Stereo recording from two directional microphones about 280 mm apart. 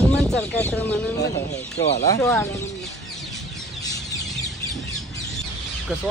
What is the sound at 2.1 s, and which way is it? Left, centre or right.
Speech, centre.